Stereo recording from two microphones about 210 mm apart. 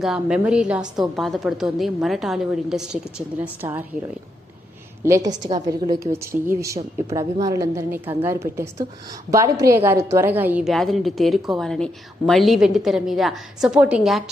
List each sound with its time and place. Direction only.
0.0 s a woman's voice: 5° right (ahead or behind)
5.0 s a woman's voice: 15° right (ahead or behind)